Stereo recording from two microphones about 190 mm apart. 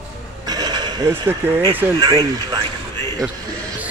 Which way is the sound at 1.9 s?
20° right (ahead or behind).